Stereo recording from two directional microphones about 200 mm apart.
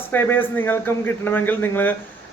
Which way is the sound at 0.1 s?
10° left (ahead or behind).